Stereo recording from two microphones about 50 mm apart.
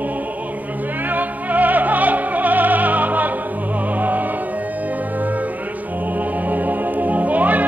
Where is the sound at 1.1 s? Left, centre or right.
Right.